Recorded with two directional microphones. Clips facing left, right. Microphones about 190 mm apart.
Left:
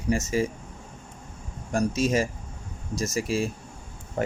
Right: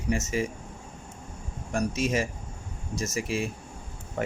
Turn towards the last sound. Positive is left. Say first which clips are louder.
# left 3 dB
turn(degrees=35)  # may be behind; listen again after turning